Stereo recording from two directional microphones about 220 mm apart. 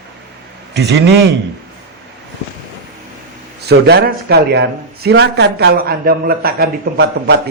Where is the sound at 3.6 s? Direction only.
45° right (ahead or behind).